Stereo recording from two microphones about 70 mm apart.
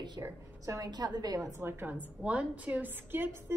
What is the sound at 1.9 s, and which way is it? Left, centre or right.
A woman's voice, right.